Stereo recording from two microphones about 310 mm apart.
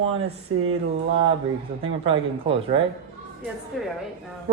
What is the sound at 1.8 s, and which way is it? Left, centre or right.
Speech, centre.